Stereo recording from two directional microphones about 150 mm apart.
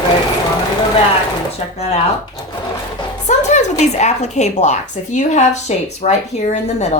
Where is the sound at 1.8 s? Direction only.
45° left (ahead or behind).